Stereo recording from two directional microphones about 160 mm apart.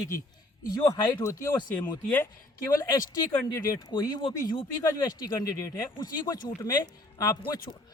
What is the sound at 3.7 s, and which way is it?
Speech, 25° left (ahead or behind).